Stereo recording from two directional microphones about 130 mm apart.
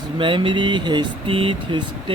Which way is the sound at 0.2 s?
40° right (ahead or behind).